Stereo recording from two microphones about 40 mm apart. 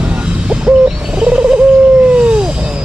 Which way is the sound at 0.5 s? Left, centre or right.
Right.